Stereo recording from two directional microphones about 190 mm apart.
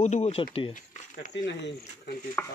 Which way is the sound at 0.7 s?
45° left (ahead or behind).